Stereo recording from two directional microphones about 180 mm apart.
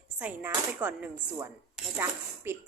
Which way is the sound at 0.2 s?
10° right (ahead or behind).